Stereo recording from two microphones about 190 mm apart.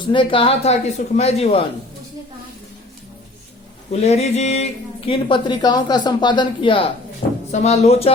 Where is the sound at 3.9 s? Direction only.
35° left (ahead or behind).